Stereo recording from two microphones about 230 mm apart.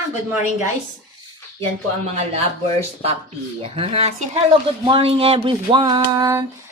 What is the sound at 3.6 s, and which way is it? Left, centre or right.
Speech, right.